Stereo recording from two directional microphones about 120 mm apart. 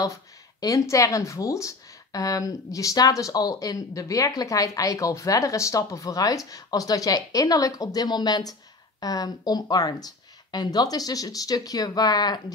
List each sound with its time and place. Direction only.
0.6 s speech: 30° left (ahead or behind)